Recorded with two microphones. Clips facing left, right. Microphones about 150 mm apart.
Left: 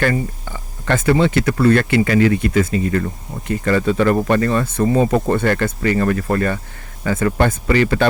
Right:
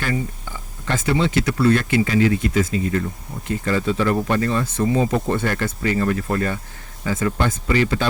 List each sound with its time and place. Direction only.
0.9 s speech: 55° left (ahead or behind)